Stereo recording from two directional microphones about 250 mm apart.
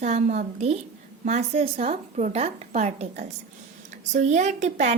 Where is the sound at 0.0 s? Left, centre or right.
Right.